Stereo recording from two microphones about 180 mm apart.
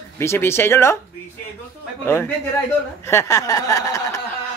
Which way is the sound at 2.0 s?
15° left (ahead or behind).